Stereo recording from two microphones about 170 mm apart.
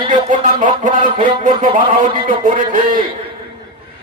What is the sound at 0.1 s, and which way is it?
Music, 50° right (ahead or behind).